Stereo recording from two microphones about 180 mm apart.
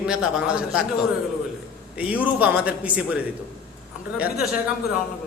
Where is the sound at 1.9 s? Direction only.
10° right (ahead or behind).